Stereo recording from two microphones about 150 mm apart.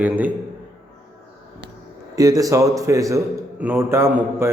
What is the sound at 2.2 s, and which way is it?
A man's voice, 25° right (ahead or behind).